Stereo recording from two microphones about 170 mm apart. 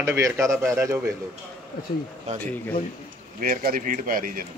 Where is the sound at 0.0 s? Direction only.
15° right (ahead or behind).